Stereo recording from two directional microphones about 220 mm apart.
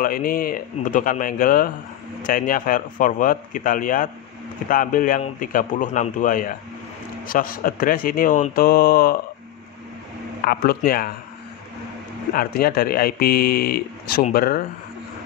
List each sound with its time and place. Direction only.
0.0 s speech: 40° left (ahead or behind)
10.4 s speech: 45° left (ahead or behind)
12.3 s speech: 40° left (ahead or behind)